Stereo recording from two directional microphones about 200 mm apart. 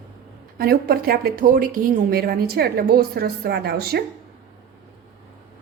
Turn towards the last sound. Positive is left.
turn(degrees=-50)  # may be behind; listen again after turning